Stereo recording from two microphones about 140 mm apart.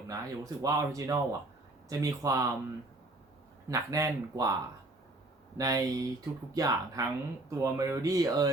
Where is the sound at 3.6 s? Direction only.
25° right (ahead or behind).